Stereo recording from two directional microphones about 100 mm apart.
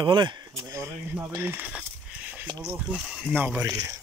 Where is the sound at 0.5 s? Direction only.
30° right (ahead or behind).